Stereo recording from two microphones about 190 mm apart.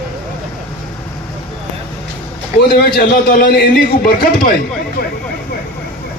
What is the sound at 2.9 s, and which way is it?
A man's voice, 50° left (ahead or behind).